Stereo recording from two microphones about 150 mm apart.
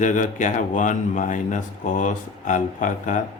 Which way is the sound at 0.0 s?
60° left (ahead or behind).